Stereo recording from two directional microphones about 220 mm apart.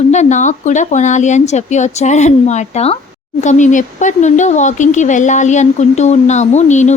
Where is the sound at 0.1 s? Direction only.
30° left (ahead or behind).